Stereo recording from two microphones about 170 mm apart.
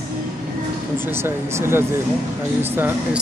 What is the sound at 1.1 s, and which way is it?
Speech, 15° right (ahead or behind).